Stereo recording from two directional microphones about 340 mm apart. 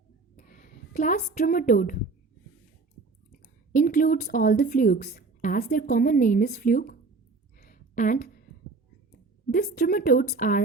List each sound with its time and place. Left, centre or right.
0.3 s a woman's voice: left
3.7 s speech: left
7.6 s a sound: left
9.5 s speech: left